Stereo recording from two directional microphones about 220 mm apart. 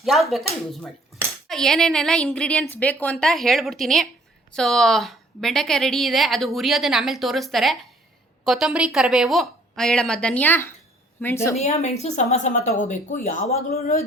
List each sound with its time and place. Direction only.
0.0 s a woman's voice: centre (ahead or behind)
11.5 s speech: 30° left (ahead or behind)